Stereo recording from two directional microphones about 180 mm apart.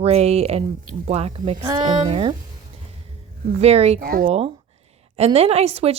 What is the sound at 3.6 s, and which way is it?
Speech, 35° right (ahead or behind).